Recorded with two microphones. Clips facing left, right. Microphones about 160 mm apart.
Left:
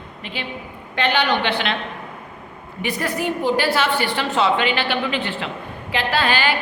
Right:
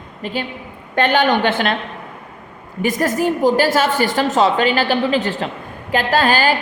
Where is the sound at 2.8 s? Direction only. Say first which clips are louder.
Right 6 dB; 45° right (ahead or behind).